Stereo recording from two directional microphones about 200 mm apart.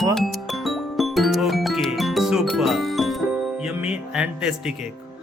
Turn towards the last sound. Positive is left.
turn(degrees=-5)  # may be behind; listen again after turning